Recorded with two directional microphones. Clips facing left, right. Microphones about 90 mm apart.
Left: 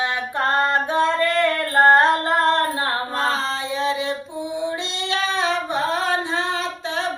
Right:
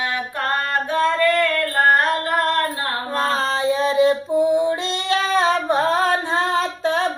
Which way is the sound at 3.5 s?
45° right (ahead or behind).